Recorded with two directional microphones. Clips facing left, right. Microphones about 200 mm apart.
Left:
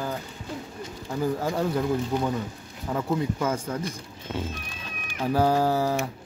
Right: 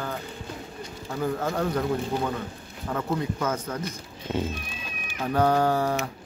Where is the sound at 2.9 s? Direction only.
10° left (ahead or behind).